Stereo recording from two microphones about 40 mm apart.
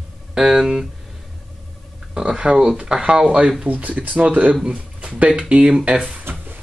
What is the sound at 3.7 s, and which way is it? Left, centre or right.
Speech, right.